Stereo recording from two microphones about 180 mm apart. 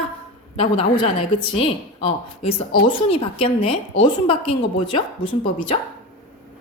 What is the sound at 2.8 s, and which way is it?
A woman's voice, 30° left (ahead or behind).